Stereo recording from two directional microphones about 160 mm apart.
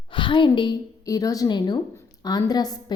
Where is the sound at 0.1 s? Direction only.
30° left (ahead or behind).